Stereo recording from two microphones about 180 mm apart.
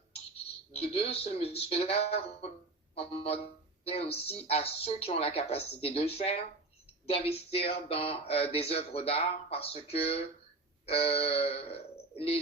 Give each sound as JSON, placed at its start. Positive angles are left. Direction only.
{"t": 0.7, "sound": "speech", "side_deg": 35}